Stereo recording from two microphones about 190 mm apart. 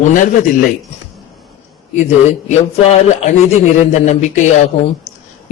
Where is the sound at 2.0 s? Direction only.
40° left (ahead or behind).